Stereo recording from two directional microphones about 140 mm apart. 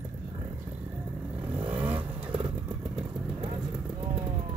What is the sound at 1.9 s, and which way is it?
Vehicle, 40° right (ahead or behind).